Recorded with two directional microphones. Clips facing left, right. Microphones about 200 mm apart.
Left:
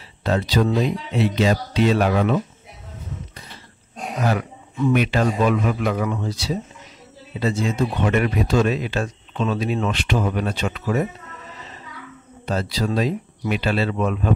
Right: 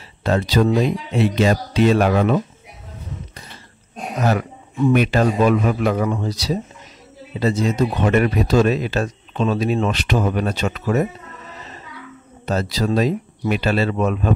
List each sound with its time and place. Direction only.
0.2 s speech: 50° right (ahead or behind)
4.3 s speech: 30° right (ahead or behind)
4.9 s speech: 45° right (ahead or behind)
12.4 s speech: 45° right (ahead or behind)